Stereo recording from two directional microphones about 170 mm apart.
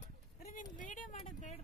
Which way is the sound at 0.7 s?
50° left (ahead or behind).